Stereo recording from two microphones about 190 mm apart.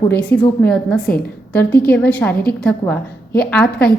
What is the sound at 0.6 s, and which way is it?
A woman's voice, 5° left (ahead or behind).